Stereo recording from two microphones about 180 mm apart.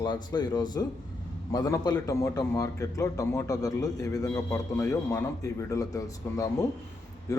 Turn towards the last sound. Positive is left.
turn(degrees=20)  # may be behind; listen again after turning